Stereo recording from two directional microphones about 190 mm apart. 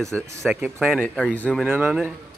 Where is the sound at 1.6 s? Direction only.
5° right (ahead or behind).